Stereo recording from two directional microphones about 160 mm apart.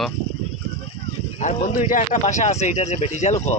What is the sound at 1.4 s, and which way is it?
Speech, 45° left (ahead or behind).